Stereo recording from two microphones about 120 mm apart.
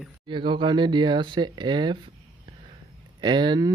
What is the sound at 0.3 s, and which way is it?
Speech, 40° right (ahead or behind).